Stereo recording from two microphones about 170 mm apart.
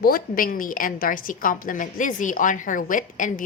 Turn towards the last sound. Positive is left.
turn(degrees=50)  # may be behind; listen again after turning